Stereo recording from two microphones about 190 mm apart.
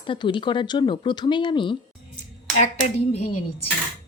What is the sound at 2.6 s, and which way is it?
Hands, 35° left (ahead or behind).